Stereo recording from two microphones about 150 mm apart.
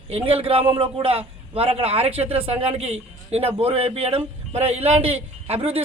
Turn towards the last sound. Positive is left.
turn(degrees=-40)  # may be behind; listen again after turning